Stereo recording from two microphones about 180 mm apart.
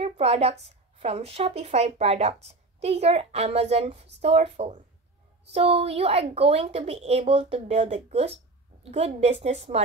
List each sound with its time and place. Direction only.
0.0 s a woman's voice: 35° right (ahead or behind)